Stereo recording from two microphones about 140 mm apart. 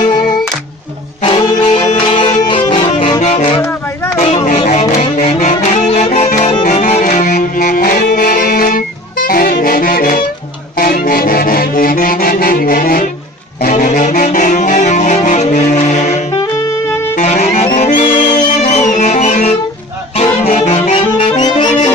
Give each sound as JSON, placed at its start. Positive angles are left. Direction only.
{"t": 1.2, "sound": "music", "side_deg": 40}
{"t": 3.2, "sound": "saxophone", "side_deg": 50}
{"t": 4.6, "sound": "music", "side_deg": 55}
{"t": 13.7, "sound": "music", "side_deg": 60}
{"t": 17.7, "sound": "music", "side_deg": 65}
{"t": 20.6, "sound": "music", "side_deg": 45}
{"t": 21.4, "sound": "music", "side_deg": 30}